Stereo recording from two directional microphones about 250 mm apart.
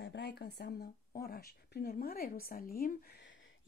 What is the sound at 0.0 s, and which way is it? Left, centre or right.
A woman's voice, left.